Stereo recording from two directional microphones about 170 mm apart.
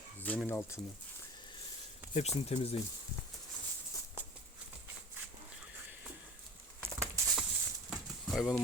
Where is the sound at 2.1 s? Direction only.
40° left (ahead or behind).